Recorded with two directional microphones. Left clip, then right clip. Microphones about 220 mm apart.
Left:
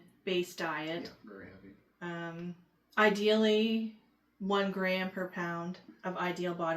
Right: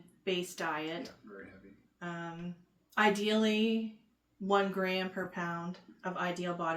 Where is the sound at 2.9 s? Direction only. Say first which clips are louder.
Left 2 dB; 25° right (ahead or behind).